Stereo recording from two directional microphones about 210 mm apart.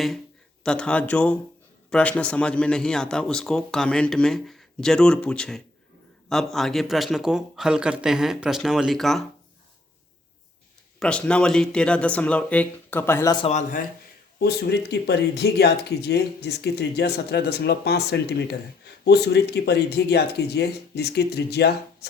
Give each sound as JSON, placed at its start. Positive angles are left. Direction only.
{"t": 0.6, "sound": "a man's voice", "side_deg": 5}
{"t": 11.0, "sound": "a man's voice", "side_deg": 5}
{"t": 13.5, "sound": "speech", "side_deg": 35}
{"t": 14.3, "sound": "speech", "side_deg": 45}